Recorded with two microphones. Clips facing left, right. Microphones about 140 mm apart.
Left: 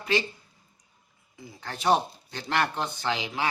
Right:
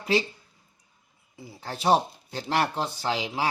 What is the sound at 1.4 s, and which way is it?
Speech, 30° right (ahead or behind).